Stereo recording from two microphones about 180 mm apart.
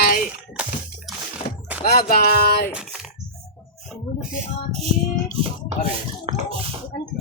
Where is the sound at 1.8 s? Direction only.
55° left (ahead or behind).